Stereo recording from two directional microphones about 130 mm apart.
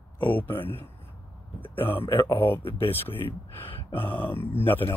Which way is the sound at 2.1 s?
20° left (ahead or behind).